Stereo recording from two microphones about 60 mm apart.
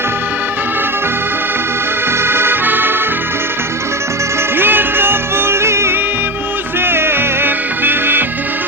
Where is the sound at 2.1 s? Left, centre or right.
Right.